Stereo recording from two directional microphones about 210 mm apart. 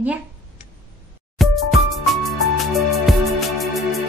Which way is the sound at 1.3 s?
Centre (ahead or behind).